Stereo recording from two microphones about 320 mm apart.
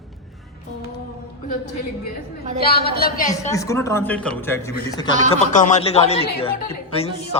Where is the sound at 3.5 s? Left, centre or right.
Centre.